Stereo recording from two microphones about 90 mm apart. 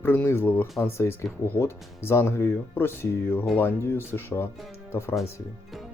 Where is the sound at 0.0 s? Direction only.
25° left (ahead or behind).